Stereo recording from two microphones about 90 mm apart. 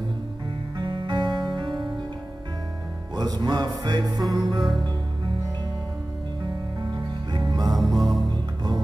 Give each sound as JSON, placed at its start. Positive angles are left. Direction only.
{"t": 0.7, "sound": "music", "side_deg": -65}
{"t": 3.2, "sound": "music", "side_deg": -55}
{"t": 4.2, "sound": "music", "side_deg": 0}
{"t": 4.5, "sound": "music", "side_deg": -60}
{"t": 6.4, "sound": "music", "side_deg": -60}
{"t": 7.6, "sound": "music", "side_deg": 0}